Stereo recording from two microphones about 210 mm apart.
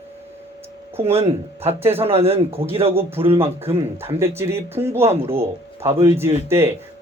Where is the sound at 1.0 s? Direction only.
30° right (ahead or behind).